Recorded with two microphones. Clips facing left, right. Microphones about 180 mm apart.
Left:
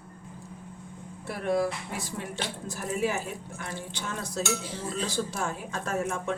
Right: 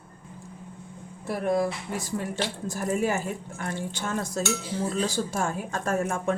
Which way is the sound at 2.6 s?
50° right (ahead or behind).